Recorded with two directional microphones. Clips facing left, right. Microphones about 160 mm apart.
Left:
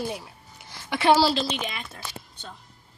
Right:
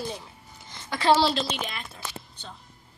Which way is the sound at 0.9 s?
20° left (ahead or behind).